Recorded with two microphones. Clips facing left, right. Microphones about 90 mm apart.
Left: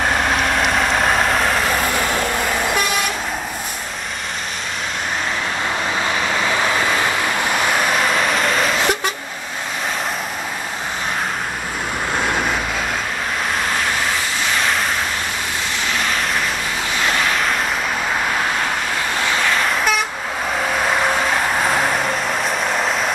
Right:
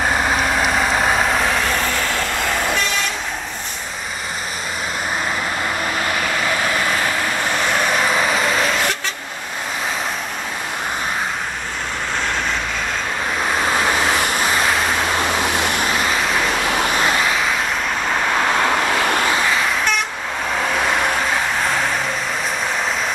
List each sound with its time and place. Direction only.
0.0 s vehicle: 5° right (ahead or behind)
7.7 s vehicle: centre (ahead or behind)
12.2 s vehicle: 10° left (ahead or behind)
15.5 s vehicle: 60° right (ahead or behind)
17.0 s vehicle: 5° right (ahead or behind)
19.5 s vehicle: centre (ahead or behind)
21.3 s vehicle: 5° left (ahead or behind)